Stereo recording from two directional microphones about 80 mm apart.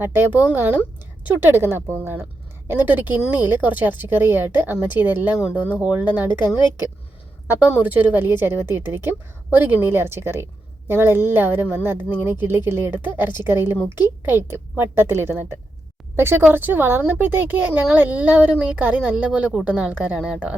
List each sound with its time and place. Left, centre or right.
0.0 s a woman's voice: right
6.6 s speech: left
7.4 s a woman's voice: right